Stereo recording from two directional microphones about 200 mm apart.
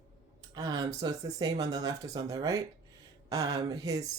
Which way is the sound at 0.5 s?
20° right (ahead or behind).